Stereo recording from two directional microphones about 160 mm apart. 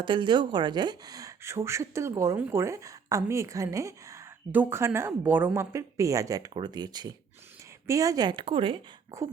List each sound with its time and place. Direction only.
0.0 s speech: 30° right (ahead or behind)
9.1 s speech: 20° right (ahead or behind)